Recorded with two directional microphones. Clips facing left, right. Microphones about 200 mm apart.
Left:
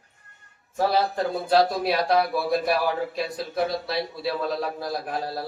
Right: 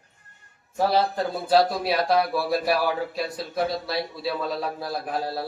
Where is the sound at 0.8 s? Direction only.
Centre (ahead or behind).